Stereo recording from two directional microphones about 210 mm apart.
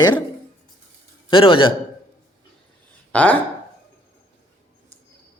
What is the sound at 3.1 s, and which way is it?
Speech, 5° left (ahead or behind).